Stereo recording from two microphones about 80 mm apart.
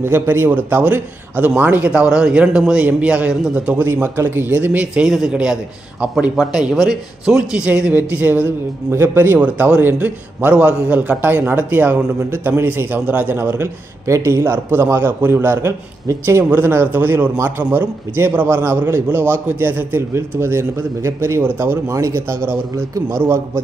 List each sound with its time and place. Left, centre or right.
0.0 s a man's voice: right
5.0 s a man's voice: centre; by 21.7 s right
21.8 s speech: right